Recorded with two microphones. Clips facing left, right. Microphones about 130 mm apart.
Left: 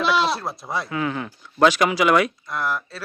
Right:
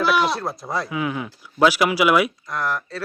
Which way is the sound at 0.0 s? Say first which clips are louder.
Right 1 dB; 25° left (ahead or behind).